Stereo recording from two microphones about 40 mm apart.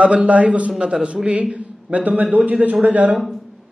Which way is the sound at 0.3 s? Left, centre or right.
Right.